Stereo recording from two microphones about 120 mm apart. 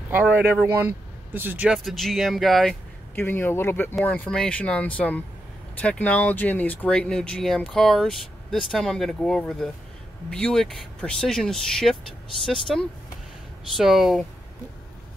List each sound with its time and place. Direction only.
0.1 s speech: 15° right (ahead or behind)
1.9 s speech: centre (ahead or behind)
3.2 s speech: 15° left (ahead or behind); by 14.2 s centre (ahead or behind)